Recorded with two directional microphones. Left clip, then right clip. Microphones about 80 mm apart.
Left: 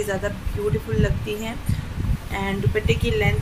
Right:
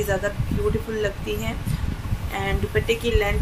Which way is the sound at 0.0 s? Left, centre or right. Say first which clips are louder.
Right 1 dB; centre.